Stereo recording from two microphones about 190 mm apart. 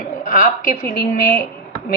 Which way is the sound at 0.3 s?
50° left (ahead or behind).